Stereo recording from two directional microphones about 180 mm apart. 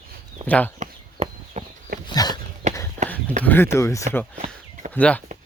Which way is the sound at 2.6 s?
40° right (ahead or behind).